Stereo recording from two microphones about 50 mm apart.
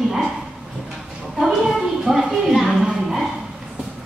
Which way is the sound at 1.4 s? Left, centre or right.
Centre.